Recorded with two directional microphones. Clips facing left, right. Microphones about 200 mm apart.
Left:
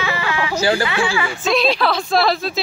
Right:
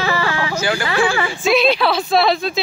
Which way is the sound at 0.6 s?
35° left (ahead or behind).